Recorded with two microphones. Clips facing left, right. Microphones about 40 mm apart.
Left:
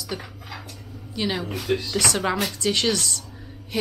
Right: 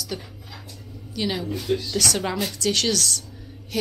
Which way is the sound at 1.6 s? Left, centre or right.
Left.